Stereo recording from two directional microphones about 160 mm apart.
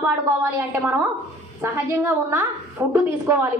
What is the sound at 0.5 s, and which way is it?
A woman's voice, 10° right (ahead or behind).